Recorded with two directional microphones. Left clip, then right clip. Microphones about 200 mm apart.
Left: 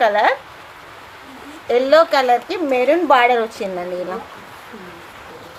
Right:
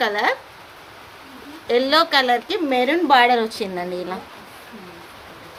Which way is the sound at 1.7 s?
45° right (ahead or behind).